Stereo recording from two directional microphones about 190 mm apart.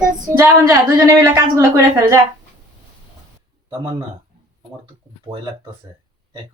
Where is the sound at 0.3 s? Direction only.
45° right (ahead or behind).